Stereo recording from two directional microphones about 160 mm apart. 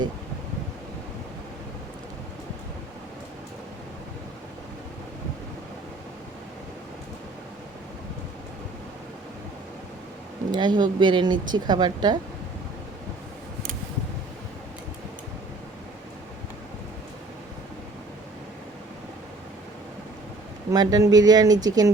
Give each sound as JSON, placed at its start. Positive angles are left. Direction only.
{"t": 10.5, "sound": "speech", "side_deg": -30}
{"t": 20.7, "sound": "speech", "side_deg": -20}